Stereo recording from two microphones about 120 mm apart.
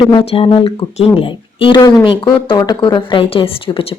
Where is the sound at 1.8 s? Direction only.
35° left (ahead or behind).